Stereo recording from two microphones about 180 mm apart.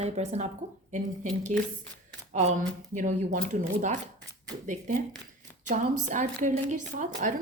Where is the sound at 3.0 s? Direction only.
45° right (ahead or behind).